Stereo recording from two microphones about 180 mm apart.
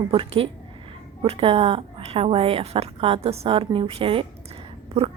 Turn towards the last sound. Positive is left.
turn(degrees=-30)  # may be behind; listen again after turning